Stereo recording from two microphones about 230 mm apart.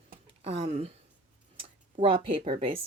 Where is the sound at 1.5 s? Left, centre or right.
Right.